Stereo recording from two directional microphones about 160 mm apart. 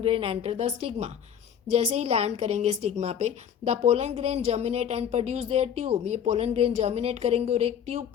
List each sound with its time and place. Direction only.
0.0 s a woman's voice: 35° right (ahead or behind)